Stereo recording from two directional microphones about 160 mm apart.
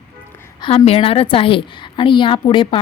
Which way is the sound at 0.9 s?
35° left (ahead or behind).